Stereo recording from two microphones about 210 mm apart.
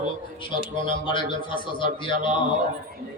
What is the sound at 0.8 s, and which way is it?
A man's voice, 25° left (ahead or behind).